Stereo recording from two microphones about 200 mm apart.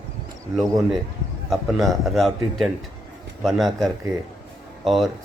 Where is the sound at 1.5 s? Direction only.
Centre (ahead or behind).